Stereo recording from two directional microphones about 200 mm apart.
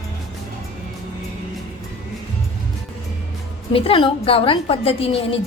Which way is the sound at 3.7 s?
30° left (ahead or behind).